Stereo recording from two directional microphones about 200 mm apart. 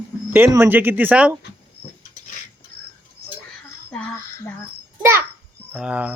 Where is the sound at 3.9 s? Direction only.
5° left (ahead or behind).